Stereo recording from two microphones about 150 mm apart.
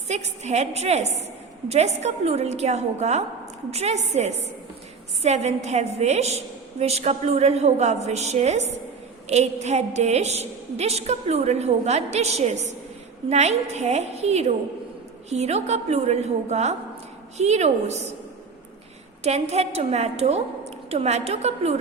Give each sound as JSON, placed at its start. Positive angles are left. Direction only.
{"t": 0.1, "sound": "a woman's voice", "side_deg": -50}
{"t": 19.2, "sound": "a woman's voice", "side_deg": -45}